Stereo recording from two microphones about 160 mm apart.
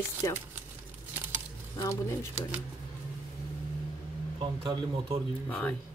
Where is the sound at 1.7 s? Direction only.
20° left (ahead or behind).